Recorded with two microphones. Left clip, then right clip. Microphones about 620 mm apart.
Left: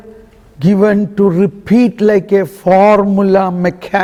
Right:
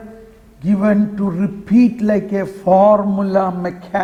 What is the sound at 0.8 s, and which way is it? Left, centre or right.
A man's voice, left.